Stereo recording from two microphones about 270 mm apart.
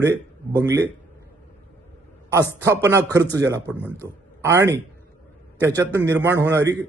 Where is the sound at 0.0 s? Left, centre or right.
Centre.